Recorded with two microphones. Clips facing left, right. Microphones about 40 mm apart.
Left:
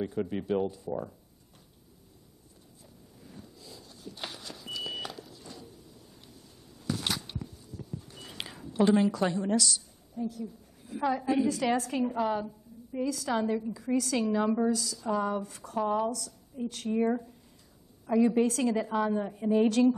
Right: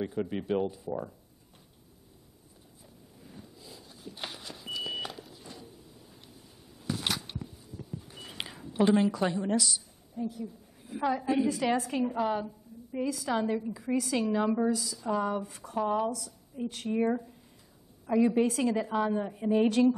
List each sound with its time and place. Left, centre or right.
0.3 s a woman's voice: centre
3.2 s vehicle: centre
11.1 s a woman's voice: centre